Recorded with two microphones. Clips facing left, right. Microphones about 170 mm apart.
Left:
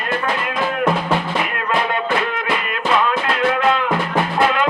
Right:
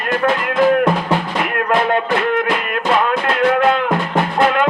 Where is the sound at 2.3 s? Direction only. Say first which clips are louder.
Right 5 dB; 55° right (ahead or behind).